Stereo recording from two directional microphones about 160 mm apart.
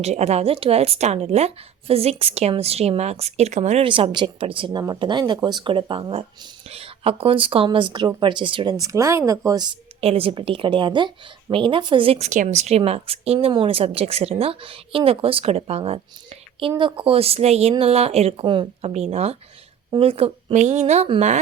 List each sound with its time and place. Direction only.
0.0 s a woman's voice: 45° right (ahead or behind); by 9.7 s 25° right (ahead or behind)
10.0 s a woman's voice: 35° right (ahead or behind)